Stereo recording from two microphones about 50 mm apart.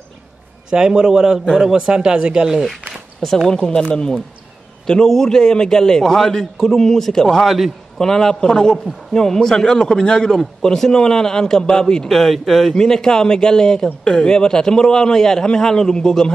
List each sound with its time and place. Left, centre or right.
0.7 s speech: centre
3.4 s a man's voice: centre
7.4 s a man's voice: centre
8.0 s a man's voice: centre